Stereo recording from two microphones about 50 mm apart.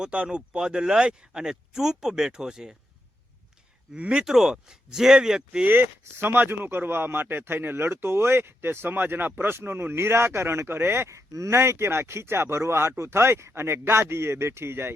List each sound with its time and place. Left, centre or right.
0.0 s speech: right
3.9 s speech: right
4.2 s speech: centre
5.6 s speech: right
11.1 s speech: right